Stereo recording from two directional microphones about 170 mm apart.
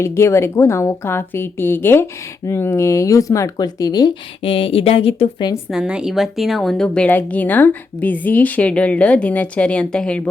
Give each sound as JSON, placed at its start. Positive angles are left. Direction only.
{"t": 0.0, "sound": "a woman's voice", "side_deg": 15}
{"t": 5.7, "sound": "a woman's voice", "side_deg": -5}